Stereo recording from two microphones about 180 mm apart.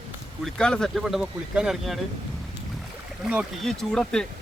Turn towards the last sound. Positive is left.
turn(degrees=5)  # may be behind; listen again after turning